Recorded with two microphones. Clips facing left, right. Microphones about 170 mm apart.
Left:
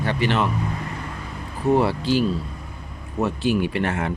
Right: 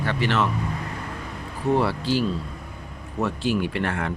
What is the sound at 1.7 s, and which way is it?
Speech, 15° left (ahead or behind).